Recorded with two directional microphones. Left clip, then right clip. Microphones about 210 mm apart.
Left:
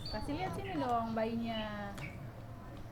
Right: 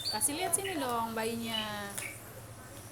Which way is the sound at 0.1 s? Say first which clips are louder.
Right 4 dB; 15° right (ahead or behind).